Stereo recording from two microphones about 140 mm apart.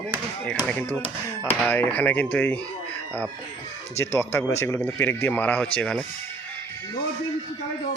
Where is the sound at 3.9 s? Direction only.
15° left (ahead or behind).